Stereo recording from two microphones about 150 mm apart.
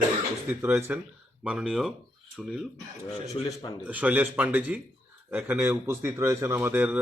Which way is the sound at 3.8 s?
10° right (ahead or behind).